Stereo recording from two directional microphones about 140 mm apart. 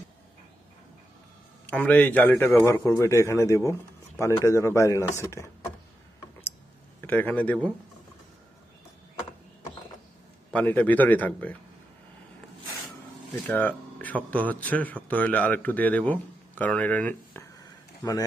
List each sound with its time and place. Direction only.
1.7 s a man's voice: 10° left (ahead or behind)
7.0 s speech: 15° left (ahead or behind)
10.5 s a man's voice: 10° left (ahead or behind)
13.5 s speech: 10° left (ahead or behind)